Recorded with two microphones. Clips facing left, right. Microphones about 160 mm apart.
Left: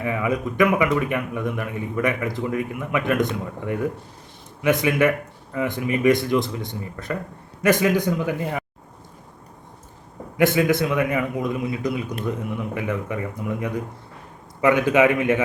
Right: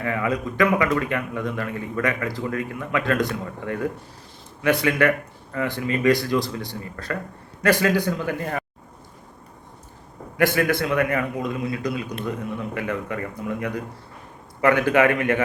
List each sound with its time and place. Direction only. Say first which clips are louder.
0.0 s speech: left 1 dB; 15° left (ahead or behind)
10.3 s speech: left 2 dB; 20° left (ahead or behind)